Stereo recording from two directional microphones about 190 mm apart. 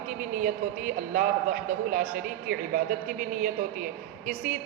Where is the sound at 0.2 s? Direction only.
45° right (ahead or behind).